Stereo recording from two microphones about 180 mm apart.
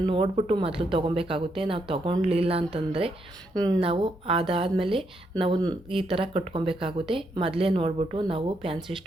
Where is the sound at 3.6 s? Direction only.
20° right (ahead or behind).